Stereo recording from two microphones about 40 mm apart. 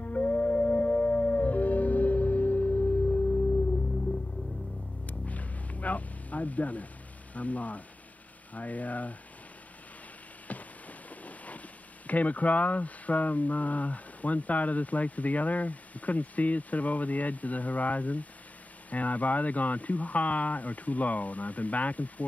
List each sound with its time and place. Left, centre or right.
0.0 s music: left
5.0 s music: left
7.3 s speech: left
10.5 s rain on surface: left
12.1 s speech: left